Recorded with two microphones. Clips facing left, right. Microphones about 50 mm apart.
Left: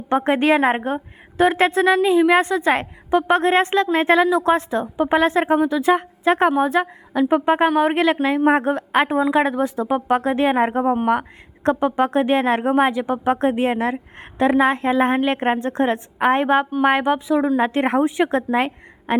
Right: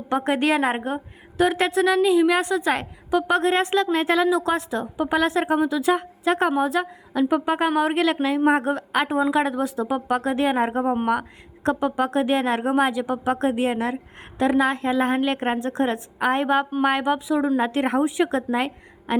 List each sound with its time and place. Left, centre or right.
0.1 s a woman's voice: left